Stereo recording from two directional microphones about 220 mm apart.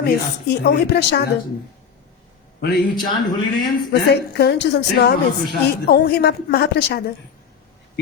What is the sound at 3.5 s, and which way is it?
Speech, 20° left (ahead or behind).